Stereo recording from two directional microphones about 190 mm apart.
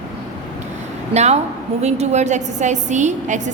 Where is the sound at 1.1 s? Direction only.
35° right (ahead or behind).